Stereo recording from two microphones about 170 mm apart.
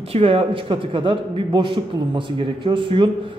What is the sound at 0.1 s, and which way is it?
A man's voice, 35° right (ahead or behind).